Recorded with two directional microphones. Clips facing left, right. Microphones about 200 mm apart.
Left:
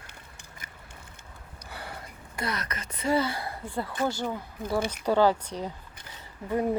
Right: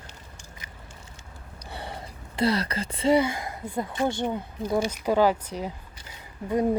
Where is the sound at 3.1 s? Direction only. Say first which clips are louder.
Right 4 dB; 15° right (ahead or behind).